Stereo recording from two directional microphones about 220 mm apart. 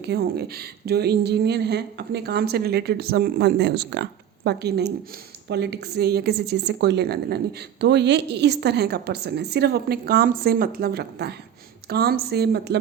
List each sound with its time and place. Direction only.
0.0 s a woman's voice: 45° right (ahead or behind)